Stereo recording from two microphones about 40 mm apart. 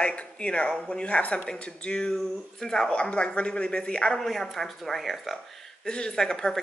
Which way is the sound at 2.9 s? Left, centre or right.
Left.